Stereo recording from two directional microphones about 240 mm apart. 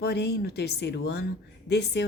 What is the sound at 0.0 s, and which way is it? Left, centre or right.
A woman's voice, left.